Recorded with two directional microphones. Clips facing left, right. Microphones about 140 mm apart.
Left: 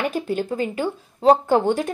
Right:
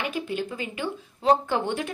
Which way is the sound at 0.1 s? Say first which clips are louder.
Left 5 dB; 45° left (ahead or behind).